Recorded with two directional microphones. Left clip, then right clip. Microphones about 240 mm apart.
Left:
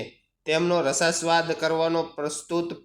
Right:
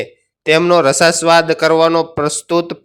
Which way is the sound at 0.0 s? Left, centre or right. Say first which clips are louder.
Right 13 dB; right.